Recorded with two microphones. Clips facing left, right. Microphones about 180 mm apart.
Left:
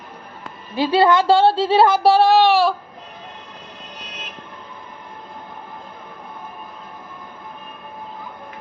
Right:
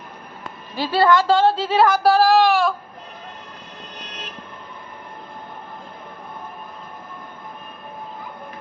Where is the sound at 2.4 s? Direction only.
30° left (ahead or behind).